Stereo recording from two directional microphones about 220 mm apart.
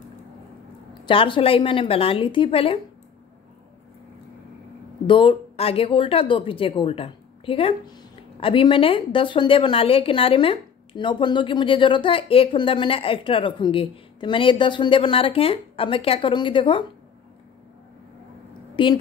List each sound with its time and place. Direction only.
1.0 s speech: 25° left (ahead or behind)
5.0 s speech: 25° left (ahead or behind)
18.8 s speech: 20° left (ahead or behind)